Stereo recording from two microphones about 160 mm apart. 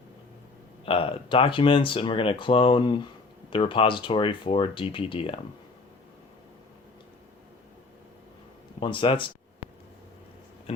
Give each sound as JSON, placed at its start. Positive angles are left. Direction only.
{"t": 0.9, "sound": "speech", "side_deg": 35}
{"t": 8.8, "sound": "speech", "side_deg": 30}
{"t": 10.7, "sound": "speech", "side_deg": 40}